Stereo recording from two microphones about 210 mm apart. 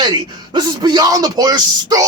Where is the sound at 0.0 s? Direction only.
20° right (ahead or behind).